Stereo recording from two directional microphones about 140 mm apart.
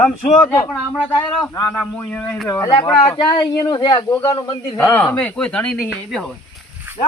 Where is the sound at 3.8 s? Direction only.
35° left (ahead or behind).